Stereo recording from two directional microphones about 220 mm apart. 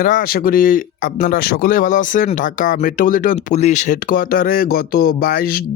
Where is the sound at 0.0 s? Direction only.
40° left (ahead or behind).